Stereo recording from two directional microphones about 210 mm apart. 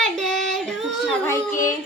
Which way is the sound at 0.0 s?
Centre (ahead or behind).